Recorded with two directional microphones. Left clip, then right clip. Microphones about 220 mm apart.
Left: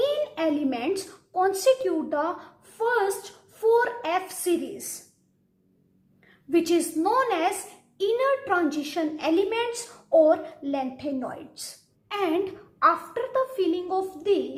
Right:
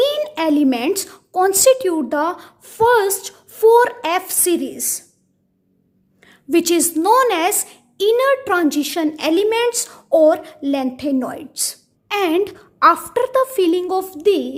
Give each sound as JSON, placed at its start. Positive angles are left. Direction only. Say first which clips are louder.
{"t": 0.0, "sound": "a child's voice", "louder": "right 7 dB", "side_deg": -50}
{"t": 6.2, "sound": "a woman's voice", "louder": "right 7 dB", "side_deg": -50}